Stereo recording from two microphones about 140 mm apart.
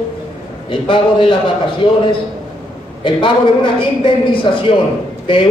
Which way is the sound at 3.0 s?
35° left (ahead or behind).